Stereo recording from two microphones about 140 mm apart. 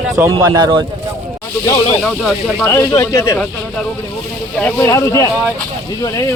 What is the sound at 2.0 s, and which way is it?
Speech, 5° left (ahead or behind).